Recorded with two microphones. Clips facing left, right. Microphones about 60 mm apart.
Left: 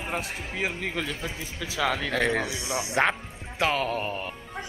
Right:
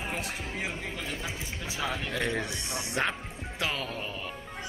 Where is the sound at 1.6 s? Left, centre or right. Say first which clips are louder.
Left 7 dB; left.